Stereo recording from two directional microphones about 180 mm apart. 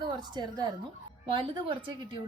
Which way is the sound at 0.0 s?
25° right (ahead or behind).